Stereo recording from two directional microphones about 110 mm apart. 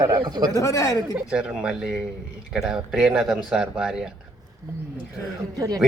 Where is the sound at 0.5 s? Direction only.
30° left (ahead or behind).